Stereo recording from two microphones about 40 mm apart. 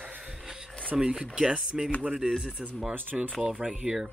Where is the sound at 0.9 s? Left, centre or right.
Centre.